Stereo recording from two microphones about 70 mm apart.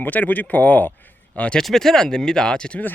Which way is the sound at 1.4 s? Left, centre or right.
Centre.